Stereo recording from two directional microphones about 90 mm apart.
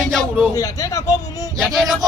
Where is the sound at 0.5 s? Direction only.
40° left (ahead or behind).